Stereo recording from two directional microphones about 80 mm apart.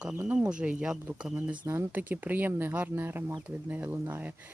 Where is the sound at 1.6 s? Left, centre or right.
Right.